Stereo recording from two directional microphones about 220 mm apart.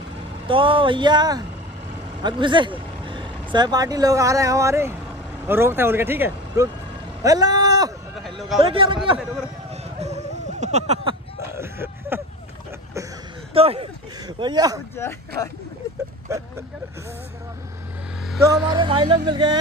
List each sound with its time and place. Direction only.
0.5 s speech: 25° right (ahead or behind)
8.2 s a sound: centre (ahead or behind)
8.5 s speech: 25° right (ahead or behind)
9.9 s a sound: 30° right (ahead or behind)
11.5 s a sound: 10° right (ahead or behind)
13.5 s speech: 25° right (ahead or behind)
15.0 s speech: 10° left (ahead or behind)
16.3 s speech: 15° right (ahead or behind)
18.4 s speech: 15° right (ahead or behind)